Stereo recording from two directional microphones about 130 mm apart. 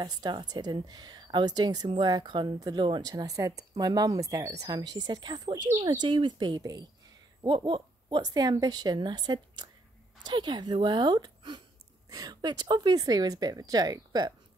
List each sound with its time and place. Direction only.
0.0 s a woman's voice: 35° right (ahead or behind)